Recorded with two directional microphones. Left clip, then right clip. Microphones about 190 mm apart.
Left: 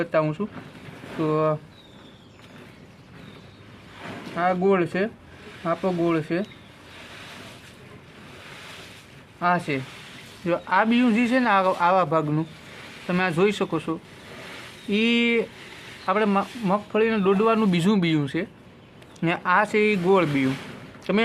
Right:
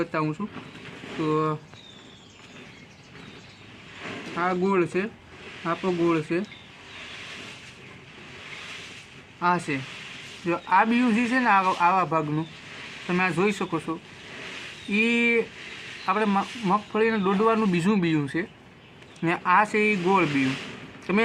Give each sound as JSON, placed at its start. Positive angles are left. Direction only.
{"t": 0.0, "sound": "speech", "side_deg": 45}
{"t": 4.0, "sound": "a sound", "side_deg": 30}
{"t": 5.6, "sound": "speech", "side_deg": 30}
{"t": 9.4, "sound": "speech", "side_deg": 40}
{"t": 10.4, "sound": "speech", "side_deg": 30}
{"t": 14.9, "sound": "speech", "side_deg": 40}
{"t": 16.0, "sound": "speech", "side_deg": 25}